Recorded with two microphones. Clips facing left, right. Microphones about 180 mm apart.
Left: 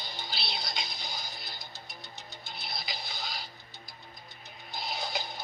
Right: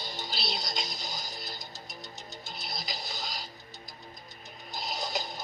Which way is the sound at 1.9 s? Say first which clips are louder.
Right 3 dB; 45° right (ahead or behind).